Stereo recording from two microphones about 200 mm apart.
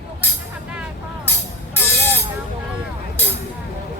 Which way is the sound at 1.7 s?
10° left (ahead or behind).